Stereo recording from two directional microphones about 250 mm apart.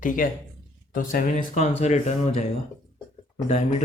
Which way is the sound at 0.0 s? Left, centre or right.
Left.